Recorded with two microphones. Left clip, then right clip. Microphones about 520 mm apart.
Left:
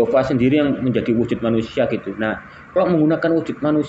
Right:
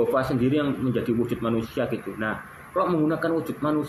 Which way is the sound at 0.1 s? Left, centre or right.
Right.